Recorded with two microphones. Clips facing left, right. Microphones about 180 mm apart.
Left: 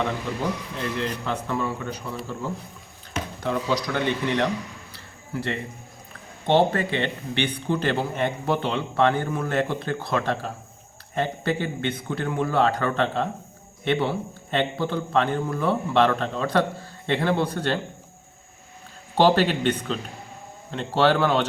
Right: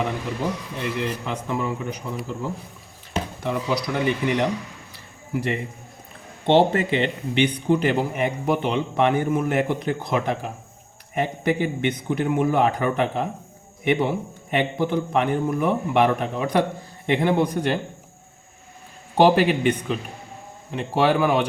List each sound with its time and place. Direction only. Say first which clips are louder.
0.8 s speech: right 2 dB; 10° right (ahead or behind)
19.1 s speech: right 2 dB; 10° right (ahead or behind)